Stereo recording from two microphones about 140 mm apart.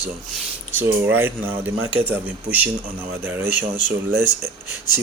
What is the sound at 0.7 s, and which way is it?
Speech, 15° right (ahead or behind).